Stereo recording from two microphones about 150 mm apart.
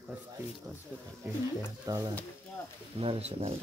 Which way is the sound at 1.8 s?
25° right (ahead or behind).